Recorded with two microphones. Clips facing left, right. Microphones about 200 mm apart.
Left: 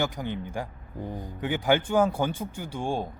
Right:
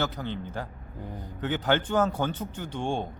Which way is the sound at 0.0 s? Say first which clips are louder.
Left 1 dB; 15° left (ahead or behind).